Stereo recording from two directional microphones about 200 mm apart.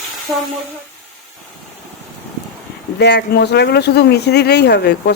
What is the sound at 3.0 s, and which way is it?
Speech, 55° left (ahead or behind).